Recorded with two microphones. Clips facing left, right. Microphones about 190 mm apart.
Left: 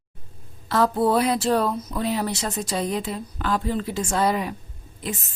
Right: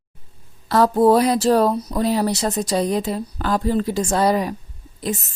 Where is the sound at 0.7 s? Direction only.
40° right (ahead or behind).